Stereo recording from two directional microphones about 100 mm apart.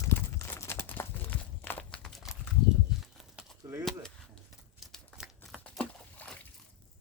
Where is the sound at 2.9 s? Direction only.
5° right (ahead or behind).